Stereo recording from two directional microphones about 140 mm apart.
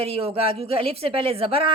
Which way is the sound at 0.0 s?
45° right (ahead or behind).